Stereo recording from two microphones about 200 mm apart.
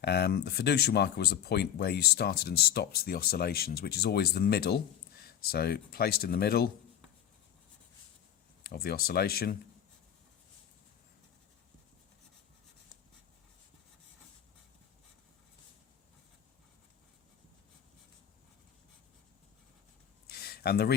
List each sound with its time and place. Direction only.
0.0 s speech: 50° left (ahead or behind)
8.6 s speech: 50° left (ahead or behind)
20.2 s a sound: 50° left (ahead or behind)